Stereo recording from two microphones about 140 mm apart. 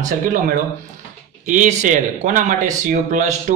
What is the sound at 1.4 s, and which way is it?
Speech, 60° right (ahead or behind).